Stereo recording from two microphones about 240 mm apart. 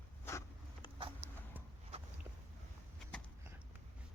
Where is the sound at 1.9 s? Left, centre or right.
Right.